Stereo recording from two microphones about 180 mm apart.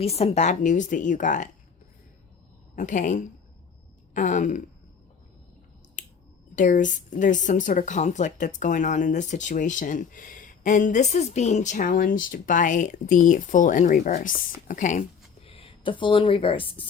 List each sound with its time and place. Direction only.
0.0 s speech: 35° left (ahead or behind)
2.7 s speech: 45° left (ahead or behind)
6.0 s finger snapping: 45° left (ahead or behind)
6.6 s speech: 45° left (ahead or behind)
15.4 s speech: 30° left (ahead or behind)